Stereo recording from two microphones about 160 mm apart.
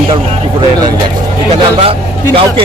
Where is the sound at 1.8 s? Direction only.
35° right (ahead or behind).